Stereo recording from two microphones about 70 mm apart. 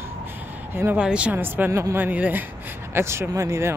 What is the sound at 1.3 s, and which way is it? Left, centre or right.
Speech, right.